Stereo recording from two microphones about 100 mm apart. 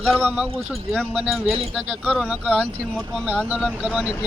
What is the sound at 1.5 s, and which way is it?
Speech, 75° right (ahead or behind).